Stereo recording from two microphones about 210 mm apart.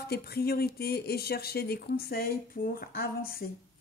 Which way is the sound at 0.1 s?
50° left (ahead or behind).